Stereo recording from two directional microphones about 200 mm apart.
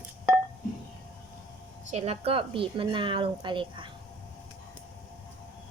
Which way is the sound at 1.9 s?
30° right (ahead or behind).